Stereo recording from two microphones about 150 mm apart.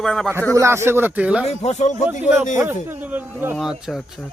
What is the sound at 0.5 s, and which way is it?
Speech, 20° right (ahead or behind).